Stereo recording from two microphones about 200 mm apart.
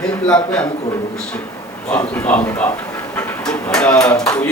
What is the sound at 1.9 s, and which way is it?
Speech, 5° left (ahead or behind).